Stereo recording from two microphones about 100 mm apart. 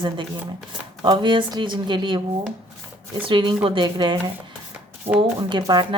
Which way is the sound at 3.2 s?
55° right (ahead or behind).